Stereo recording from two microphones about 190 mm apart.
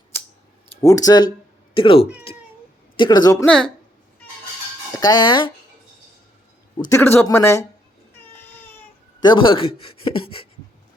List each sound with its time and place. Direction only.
0.8 s speech: 15° left (ahead or behind)
2.3 s cat: 30° left (ahead or behind)
3.0 s speech: 20° left (ahead or behind)
3.4 s a woman's voice: 5° left (ahead or behind)
4.9 s speech: 20° left (ahead or behind)
6.9 s speech: 10° left (ahead or behind)
8.3 s cat: 10° left (ahead or behind)
9.2 s speech: 25° left (ahead or behind)